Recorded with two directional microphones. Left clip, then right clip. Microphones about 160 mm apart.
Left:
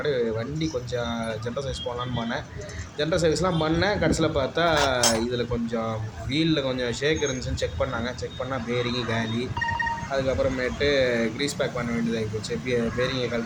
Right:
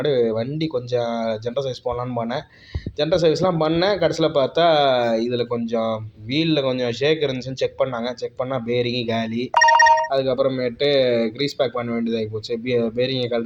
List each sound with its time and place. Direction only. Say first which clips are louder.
0.0 s speech: right 6 dB; 15° right (ahead or behind)
3.0 s speech: right 5 dB; 15° right (ahead or behind)